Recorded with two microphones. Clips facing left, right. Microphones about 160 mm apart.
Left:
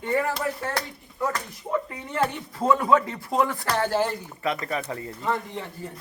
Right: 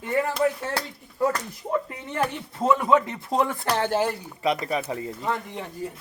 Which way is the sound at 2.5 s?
20° right (ahead or behind).